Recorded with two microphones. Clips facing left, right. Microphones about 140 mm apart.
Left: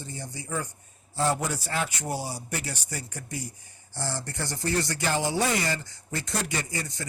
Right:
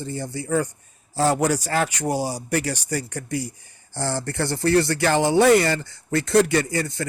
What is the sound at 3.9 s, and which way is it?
Speech, 70° right (ahead or behind).